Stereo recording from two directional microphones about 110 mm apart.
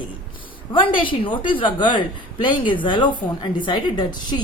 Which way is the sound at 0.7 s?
50° left (ahead or behind).